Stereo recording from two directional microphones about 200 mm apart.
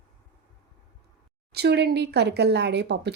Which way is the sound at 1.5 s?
55° right (ahead or behind).